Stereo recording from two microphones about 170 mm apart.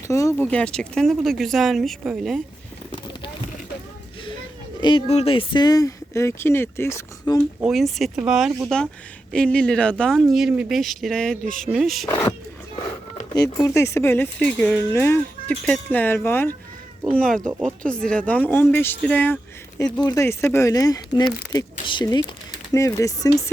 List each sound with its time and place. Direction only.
0.1 s speech: 20° left (ahead or behind); by 2.4 s centre (ahead or behind)
4.8 s speech: 30° left (ahead or behind)
7.6 s speech: centre (ahead or behind)
13.6 s speech: 15° left (ahead or behind)
19.8 s speech: 25° left (ahead or behind)